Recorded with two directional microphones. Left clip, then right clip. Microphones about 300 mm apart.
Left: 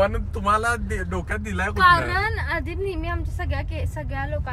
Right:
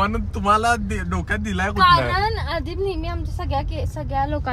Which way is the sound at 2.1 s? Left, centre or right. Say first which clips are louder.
Right 2 dB; centre.